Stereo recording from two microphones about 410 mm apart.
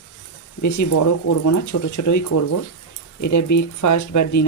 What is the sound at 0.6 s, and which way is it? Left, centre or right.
Speech, left.